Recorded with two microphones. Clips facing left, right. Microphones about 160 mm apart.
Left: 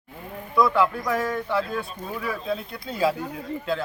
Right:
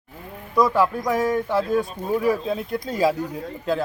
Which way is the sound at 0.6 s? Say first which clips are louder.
Right 2 dB; 40° right (ahead or behind).